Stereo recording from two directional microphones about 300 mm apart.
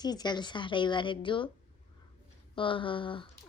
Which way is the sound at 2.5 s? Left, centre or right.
Centre.